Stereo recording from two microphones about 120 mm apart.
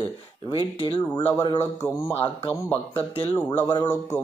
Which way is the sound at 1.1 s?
15° left (ahead or behind).